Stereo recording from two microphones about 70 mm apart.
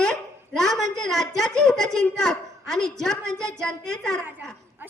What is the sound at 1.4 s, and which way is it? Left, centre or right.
A woman's voice, centre.